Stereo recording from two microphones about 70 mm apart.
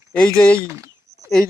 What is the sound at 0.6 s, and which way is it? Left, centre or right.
Speech, right.